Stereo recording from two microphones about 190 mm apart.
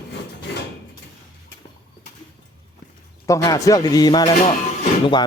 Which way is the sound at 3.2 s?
15° left (ahead or behind).